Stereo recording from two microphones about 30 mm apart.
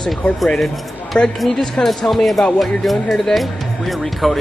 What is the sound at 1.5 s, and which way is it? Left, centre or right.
Speech, centre.